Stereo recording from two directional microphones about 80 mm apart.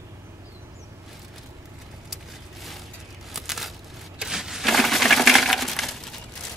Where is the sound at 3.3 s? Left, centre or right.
Centre.